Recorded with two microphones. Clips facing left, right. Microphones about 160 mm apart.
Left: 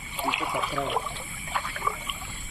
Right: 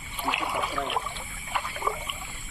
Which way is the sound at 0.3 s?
60° right (ahead or behind).